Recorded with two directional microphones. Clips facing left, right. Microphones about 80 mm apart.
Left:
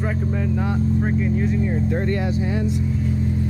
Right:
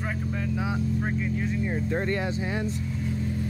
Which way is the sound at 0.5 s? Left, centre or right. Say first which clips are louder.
Left 4 dB; centre.